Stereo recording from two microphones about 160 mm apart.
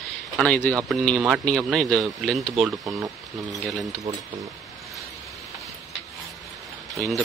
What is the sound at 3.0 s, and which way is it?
Speech, 20° right (ahead or behind).